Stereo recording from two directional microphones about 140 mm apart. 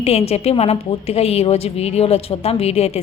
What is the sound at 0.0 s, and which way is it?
A woman's voice, 45° left (ahead or behind).